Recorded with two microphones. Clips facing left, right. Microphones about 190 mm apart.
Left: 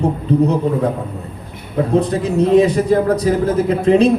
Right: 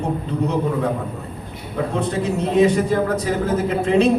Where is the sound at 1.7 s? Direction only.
35° left (ahead or behind).